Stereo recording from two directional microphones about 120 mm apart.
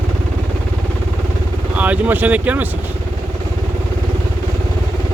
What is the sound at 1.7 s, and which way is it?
Speech, 10° right (ahead or behind).